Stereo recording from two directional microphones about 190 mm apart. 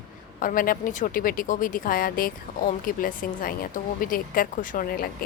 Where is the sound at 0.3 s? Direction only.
45° left (ahead or behind).